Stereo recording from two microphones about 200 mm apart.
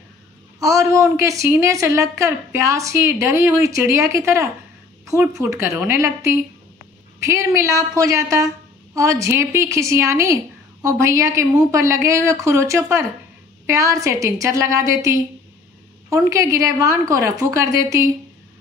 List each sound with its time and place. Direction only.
0.6 s a woman's voice: 15° right (ahead or behind)